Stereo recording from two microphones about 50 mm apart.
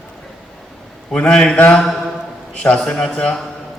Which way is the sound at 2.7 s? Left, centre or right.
Left.